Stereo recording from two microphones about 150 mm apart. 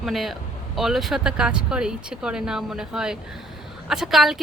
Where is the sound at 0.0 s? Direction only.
Centre (ahead or behind).